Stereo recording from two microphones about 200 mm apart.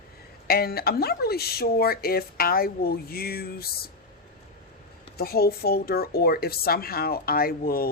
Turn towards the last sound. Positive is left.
turn(degrees=50)  # may be behind; listen again after turning